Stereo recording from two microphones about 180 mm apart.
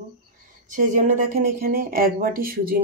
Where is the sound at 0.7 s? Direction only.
45° right (ahead or behind).